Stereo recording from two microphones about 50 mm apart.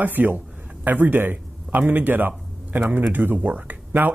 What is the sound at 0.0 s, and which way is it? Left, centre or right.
A man's voice, right.